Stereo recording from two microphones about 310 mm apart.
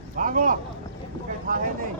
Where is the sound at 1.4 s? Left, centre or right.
Right.